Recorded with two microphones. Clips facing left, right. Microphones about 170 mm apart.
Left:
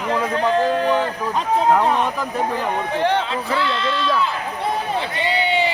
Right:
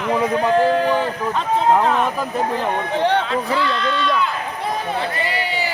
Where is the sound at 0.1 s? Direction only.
10° right (ahead or behind).